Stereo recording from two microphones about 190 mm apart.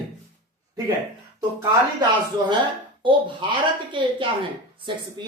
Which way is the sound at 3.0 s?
25° right (ahead or behind).